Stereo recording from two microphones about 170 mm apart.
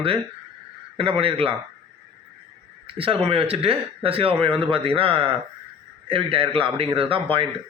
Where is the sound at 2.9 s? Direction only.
30° right (ahead or behind).